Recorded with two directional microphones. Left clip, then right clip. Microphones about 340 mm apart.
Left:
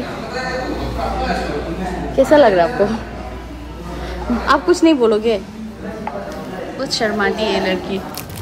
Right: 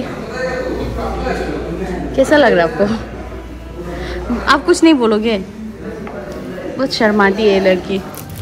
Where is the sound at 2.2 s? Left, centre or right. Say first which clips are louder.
Even; right.